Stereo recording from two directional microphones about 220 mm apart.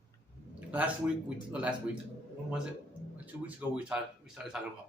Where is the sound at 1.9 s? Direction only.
5° right (ahead or behind).